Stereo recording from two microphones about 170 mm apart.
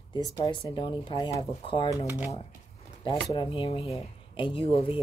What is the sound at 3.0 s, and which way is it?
Speech, 30° left (ahead or behind).